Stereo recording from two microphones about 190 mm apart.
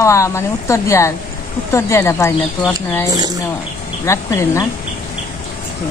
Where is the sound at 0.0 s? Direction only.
15° left (ahead or behind).